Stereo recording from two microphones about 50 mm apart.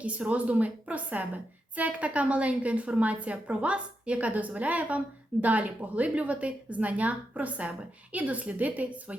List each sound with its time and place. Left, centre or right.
0.0 s a woman's voice: right